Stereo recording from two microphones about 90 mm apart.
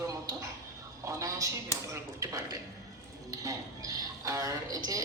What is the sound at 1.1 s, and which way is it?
Speech, 35° right (ahead or behind).